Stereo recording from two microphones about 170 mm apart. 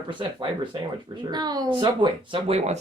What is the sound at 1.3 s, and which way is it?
Speech, 25° right (ahead or behind).